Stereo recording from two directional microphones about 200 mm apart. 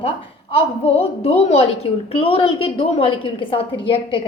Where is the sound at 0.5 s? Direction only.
30° left (ahead or behind).